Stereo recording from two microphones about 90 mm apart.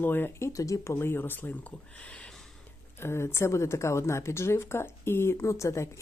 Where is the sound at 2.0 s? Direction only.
15° left (ahead or behind).